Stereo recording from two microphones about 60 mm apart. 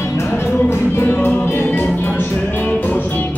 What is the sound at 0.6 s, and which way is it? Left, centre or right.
Music, left.